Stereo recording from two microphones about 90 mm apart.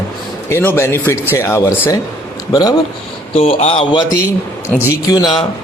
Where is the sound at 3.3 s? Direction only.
90° left.